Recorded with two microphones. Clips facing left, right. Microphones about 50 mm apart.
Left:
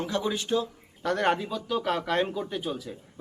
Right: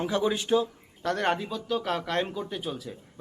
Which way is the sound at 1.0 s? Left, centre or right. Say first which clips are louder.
Left 1 dB; centre.